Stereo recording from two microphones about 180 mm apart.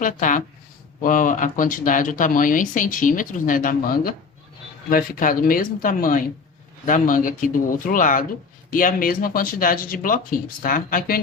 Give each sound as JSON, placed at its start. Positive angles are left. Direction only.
{"t": 0.0, "sound": "speech", "side_deg": 45}